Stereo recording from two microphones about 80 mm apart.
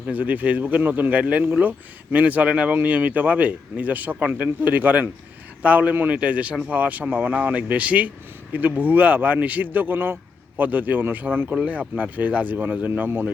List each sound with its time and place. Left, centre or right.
0.1 s speech: centre